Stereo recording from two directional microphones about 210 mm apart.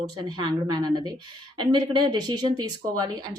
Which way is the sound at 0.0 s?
20° right (ahead or behind).